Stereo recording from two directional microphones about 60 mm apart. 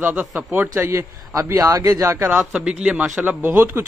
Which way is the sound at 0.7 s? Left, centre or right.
Right.